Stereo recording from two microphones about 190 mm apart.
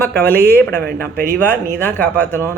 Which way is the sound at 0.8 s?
55° right (ahead or behind).